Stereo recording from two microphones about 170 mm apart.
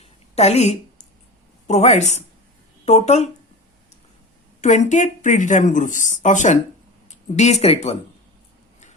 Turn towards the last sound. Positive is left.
turn(degrees=35)  # may be behind; listen again after turning